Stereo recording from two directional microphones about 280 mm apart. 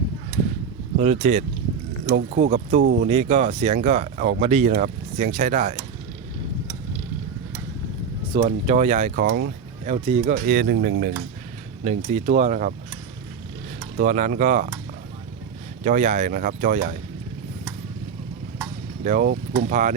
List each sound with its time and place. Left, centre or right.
0.9 s speech: right
8.3 s speech: right
11.9 s speech: right
13.9 s speech: right
15.8 s speech: right
19.0 s speech: right